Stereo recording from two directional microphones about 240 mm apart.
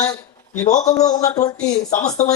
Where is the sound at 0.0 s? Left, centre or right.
Centre.